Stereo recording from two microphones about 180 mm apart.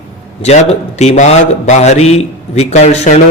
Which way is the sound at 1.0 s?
40° left (ahead or behind).